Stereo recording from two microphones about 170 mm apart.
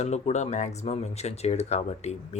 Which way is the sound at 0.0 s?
40° left (ahead or behind).